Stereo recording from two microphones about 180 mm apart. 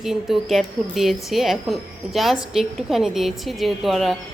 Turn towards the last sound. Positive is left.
turn(degrees=0)  # may be behind; listen again after turning